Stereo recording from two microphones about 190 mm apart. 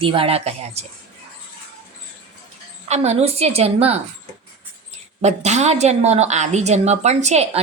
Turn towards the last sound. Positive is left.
turn(degrees=-35)  # may be behind; listen again after turning